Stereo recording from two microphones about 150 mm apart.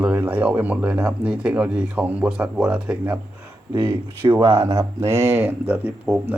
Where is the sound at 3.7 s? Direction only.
30° right (ahead or behind).